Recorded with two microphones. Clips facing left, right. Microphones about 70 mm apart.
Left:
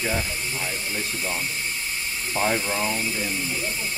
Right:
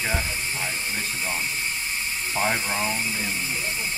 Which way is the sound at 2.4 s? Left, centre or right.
Centre.